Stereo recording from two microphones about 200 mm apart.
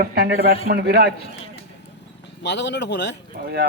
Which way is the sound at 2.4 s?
60° left (ahead or behind).